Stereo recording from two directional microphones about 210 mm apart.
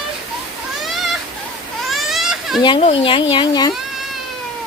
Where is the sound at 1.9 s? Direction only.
Centre (ahead or behind).